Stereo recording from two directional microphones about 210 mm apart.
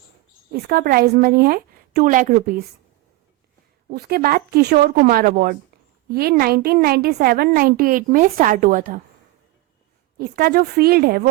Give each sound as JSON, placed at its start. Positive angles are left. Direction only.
{"t": 0.5, "sound": "a woman's voice", "side_deg": -45}
{"t": 3.9, "sound": "a woman's voice", "side_deg": -50}
{"t": 10.2, "sound": "a woman's voice", "side_deg": -45}